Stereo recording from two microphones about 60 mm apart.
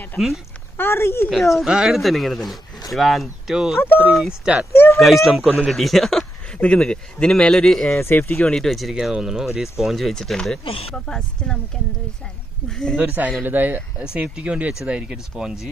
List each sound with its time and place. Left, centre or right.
0.2 s speech: centre
0.7 s speech: left
1.3 s speech: centre
2.0 s speech: centre
4.9 s speech: centre
7.9 s speech: left
8.4 s speech: centre
12.6 s speech: centre
12.9 s speech: right; by 15.7 s centre